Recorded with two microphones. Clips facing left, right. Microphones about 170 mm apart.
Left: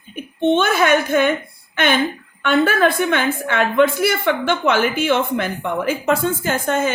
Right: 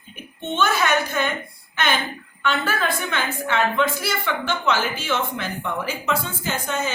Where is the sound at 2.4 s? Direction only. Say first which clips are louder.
Left 8 dB; 60° left (ahead or behind).